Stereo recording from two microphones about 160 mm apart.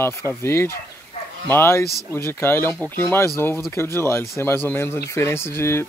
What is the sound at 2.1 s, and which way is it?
Speech, 15° left (ahead or behind).